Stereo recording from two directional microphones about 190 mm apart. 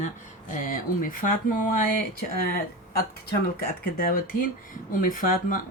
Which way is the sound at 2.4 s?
50° left (ahead or behind).